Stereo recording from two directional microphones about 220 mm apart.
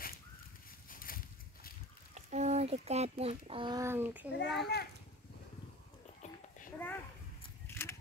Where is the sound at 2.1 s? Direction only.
30° right (ahead or behind); by 4.3 s 10° right (ahead or behind).